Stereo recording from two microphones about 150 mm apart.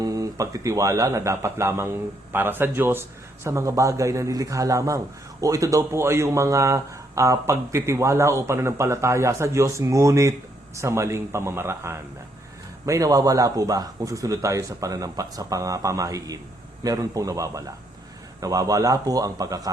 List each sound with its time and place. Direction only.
0.0 s speech: 25° right (ahead or behind)